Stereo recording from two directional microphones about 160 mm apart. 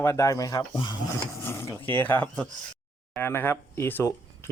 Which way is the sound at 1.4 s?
15° left (ahead or behind).